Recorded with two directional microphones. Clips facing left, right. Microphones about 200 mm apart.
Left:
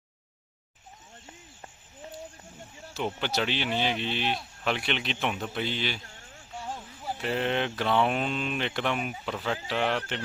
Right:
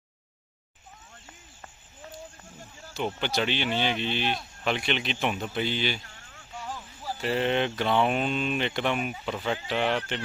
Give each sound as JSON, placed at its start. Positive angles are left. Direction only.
{"t": 2.9, "sound": "speech", "side_deg": 0}
{"t": 6.3, "sound": "a sound", "side_deg": 30}
{"t": 7.2, "sound": "speech", "side_deg": 0}